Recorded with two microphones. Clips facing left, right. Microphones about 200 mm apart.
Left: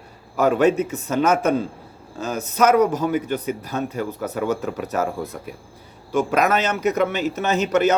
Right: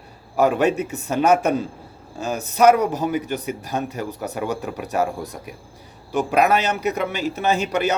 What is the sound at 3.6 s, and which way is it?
A man's voice, 15° right (ahead or behind).